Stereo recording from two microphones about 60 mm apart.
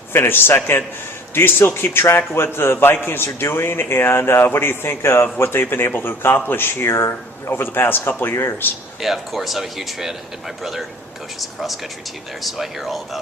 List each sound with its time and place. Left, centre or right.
0.1 s speech: left
9.0 s speech: centre